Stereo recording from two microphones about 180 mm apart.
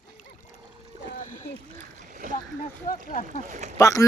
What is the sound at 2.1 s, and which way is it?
Boat, 45° right (ahead or behind).